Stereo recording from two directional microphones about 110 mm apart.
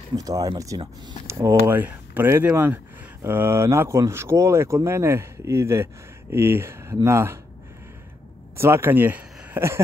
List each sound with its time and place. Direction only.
0.1 s speech: 35° right (ahead or behind)
1.2 s speech: 25° right (ahead or behind)
8.5 s speech: 25° right (ahead or behind)